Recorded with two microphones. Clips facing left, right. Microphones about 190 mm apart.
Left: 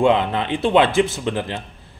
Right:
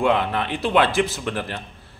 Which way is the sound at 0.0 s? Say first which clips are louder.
Left 3 dB; 20° left (ahead or behind).